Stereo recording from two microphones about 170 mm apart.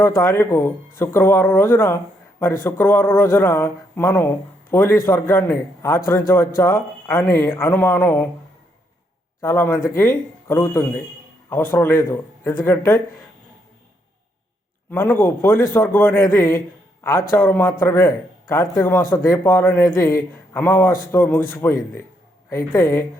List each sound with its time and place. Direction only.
0.2 s speech: 15° left (ahead or behind)
9.4 s speech: 15° left (ahead or behind)
14.8 s a man's voice: 15° left (ahead or behind)